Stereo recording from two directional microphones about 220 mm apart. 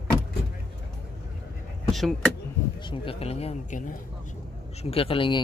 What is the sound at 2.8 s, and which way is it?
Speech, 25° left (ahead or behind).